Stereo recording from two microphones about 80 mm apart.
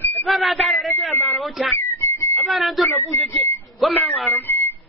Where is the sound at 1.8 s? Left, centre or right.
Left.